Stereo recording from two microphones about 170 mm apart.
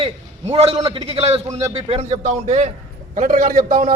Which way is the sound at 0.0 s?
35° right (ahead or behind).